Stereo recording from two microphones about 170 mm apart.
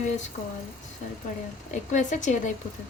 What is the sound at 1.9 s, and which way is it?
Speech, 45° left (ahead or behind).